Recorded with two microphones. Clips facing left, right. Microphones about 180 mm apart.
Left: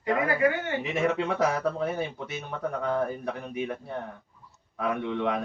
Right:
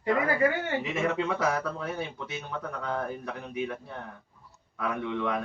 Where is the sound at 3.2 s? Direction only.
50° left (ahead or behind).